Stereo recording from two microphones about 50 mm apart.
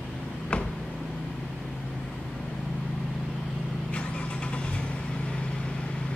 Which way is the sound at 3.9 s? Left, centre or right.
Left.